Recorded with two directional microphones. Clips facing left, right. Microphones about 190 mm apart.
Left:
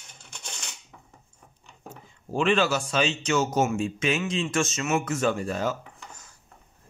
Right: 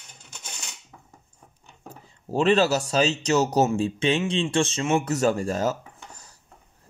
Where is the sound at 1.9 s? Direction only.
35° right (ahead or behind).